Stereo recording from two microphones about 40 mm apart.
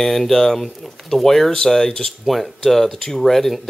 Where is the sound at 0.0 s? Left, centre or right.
Centre.